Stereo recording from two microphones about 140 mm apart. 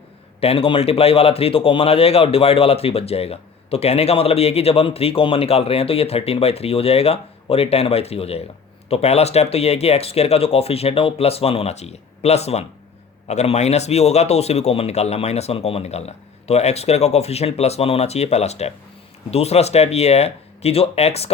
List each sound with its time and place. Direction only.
0.3 s a man's voice: 45° left (ahead or behind)